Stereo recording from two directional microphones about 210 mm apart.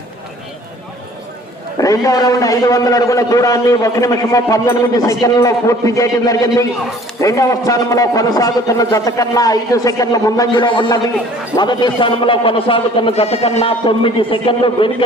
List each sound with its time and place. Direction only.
1.8 s a man's voice: 15° left (ahead or behind)